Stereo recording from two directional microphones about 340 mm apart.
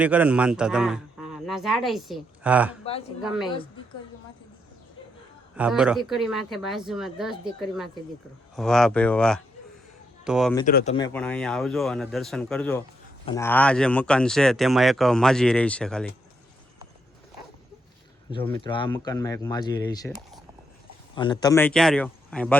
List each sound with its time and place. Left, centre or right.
0.0 s a man's voice: centre
5.5 s speech: centre
10.7 s speech: left
10.9 s speech: centre
18.3 s speech: centre
21.2 s speech: centre